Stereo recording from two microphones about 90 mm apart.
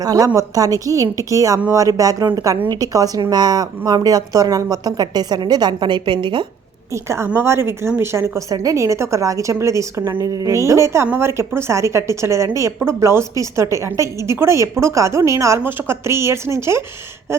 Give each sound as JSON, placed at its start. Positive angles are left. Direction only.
{"t": 0.0, "sound": "a woman's voice", "side_deg": -40}
{"t": 6.9, "sound": "a woman's voice", "side_deg": -30}
{"t": 8.4, "sound": "a woman's voice", "side_deg": -40}
{"t": 10.2, "sound": "a woman's voice", "side_deg": -40}